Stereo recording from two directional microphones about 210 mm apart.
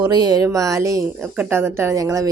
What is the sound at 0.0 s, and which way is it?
A woman's voice, 20° right (ahead or behind).